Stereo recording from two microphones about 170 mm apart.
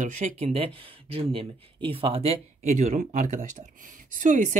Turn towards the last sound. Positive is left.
turn(degrees=-50)  # may be behind; listen again after turning